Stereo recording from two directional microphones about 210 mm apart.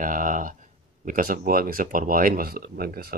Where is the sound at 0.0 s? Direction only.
40° right (ahead or behind).